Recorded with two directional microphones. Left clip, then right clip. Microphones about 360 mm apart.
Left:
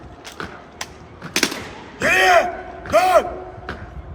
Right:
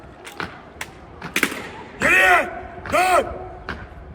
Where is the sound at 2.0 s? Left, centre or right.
Centre.